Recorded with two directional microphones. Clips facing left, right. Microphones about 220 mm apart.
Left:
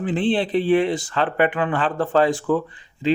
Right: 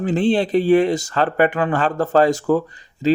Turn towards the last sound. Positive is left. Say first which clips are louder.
# right 4 dB
turn(degrees=-40)  # may be behind; listen again after turning